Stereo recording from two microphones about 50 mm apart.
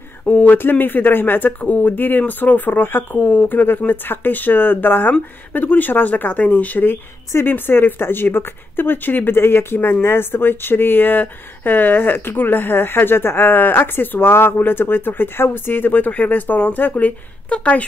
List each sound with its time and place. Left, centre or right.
0.3 s speech: left
17.5 s speech: left